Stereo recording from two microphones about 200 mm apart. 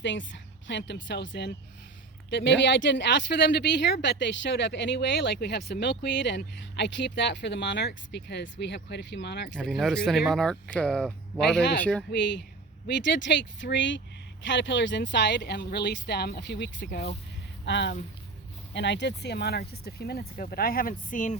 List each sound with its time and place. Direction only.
0.0 s speech: 65° left (ahead or behind)
9.6 s speech: centre (ahead or behind)
13.4 s speech: 65° left (ahead or behind); by 21.3 s 40° left (ahead or behind)